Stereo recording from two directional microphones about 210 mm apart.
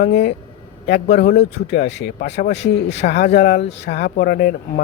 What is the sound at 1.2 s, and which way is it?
Speech, 50° left (ahead or behind).